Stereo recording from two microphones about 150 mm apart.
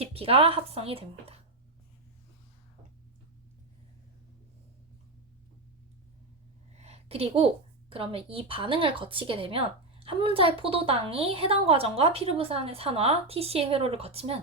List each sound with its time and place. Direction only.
0.0 s a woman's voice: 40° right (ahead or behind)
6.7 s a woman's voice: 45° right (ahead or behind)